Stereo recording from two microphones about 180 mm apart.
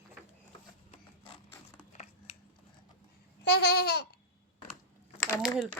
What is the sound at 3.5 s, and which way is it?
Babbling, 65° left (ahead or behind).